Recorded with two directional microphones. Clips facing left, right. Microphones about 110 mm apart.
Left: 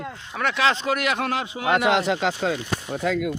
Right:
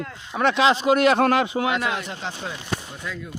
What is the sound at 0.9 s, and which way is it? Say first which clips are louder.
Speech: right 7 dB; 35° right (ahead or behind).